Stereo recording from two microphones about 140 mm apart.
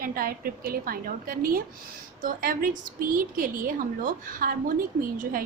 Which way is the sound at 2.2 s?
80° right.